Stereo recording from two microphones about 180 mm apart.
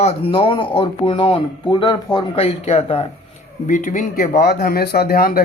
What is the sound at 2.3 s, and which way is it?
Speech, 35° left (ahead or behind).